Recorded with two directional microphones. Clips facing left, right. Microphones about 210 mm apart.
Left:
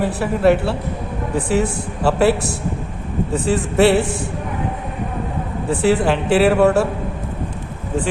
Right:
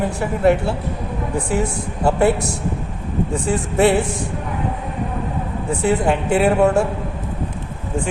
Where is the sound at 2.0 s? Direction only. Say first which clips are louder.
Left 1 dB; 75° left (ahead or behind).